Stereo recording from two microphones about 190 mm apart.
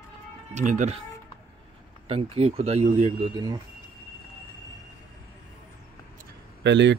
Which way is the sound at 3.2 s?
20° right (ahead or behind).